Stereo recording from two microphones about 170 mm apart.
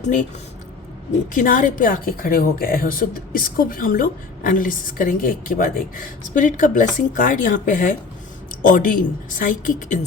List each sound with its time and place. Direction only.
0.0 s speech: 45° left (ahead or behind)
1.3 s a woman's voice: 50° left (ahead or behind)